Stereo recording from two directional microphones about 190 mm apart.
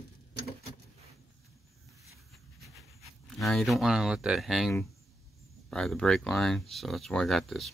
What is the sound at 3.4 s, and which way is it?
Speech, centre (ahead or behind).